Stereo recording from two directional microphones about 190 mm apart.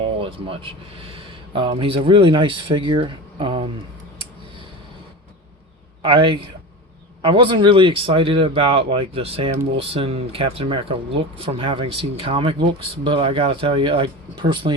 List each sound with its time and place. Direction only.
0.2 s speech: 30° right (ahead or behind)
6.0 s speech: 25° right (ahead or behind)